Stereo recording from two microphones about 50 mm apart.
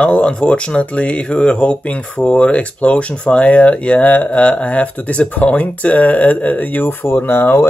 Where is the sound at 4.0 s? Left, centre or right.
Left.